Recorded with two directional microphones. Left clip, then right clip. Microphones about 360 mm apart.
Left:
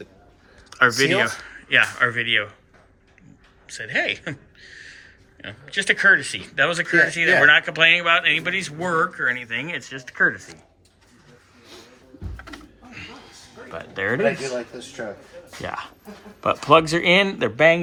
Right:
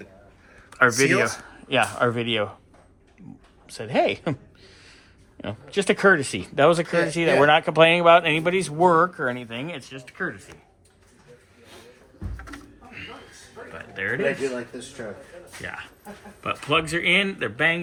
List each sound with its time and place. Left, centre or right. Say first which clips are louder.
0.7 s speech: left 1 dB; centre
3.7 s speech: right 1 dB; centre
12.5 s a sound: left 1 dB; centre
13.9 s speech: left 3 dB; centre
16.4 s speech: left 8 dB; centre